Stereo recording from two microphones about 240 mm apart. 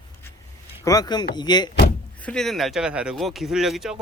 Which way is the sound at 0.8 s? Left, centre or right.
Centre.